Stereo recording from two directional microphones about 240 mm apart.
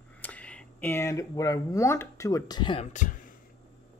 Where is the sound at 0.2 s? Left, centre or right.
Centre; by 3.2 s left.